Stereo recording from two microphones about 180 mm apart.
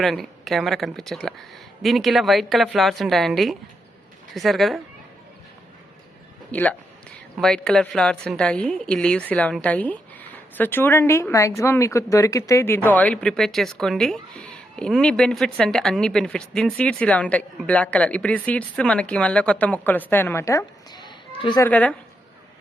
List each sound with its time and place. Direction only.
0.0 s speech: centre (ahead or behind)
6.5 s a woman's voice: 10° left (ahead or behind); by 21.6 s 25° left (ahead or behind)
21.6 s a woman's voice: 10° left (ahead or behind)